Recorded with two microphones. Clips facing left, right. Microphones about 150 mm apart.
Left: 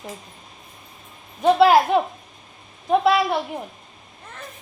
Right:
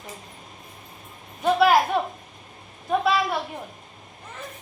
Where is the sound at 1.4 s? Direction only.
25° left (ahead or behind).